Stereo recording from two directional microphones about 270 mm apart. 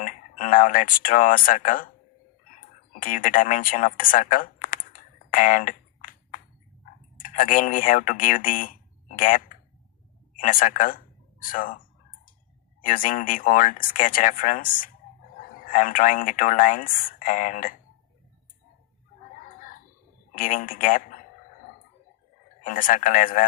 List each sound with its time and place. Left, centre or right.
0.0 s speech: left
3.0 s a sound: left
7.2 s speech: left
12.8 s speech: left
20.3 s a man's voice: left
22.6 s speech: left